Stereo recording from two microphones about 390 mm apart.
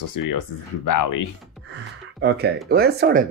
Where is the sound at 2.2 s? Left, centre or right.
Right.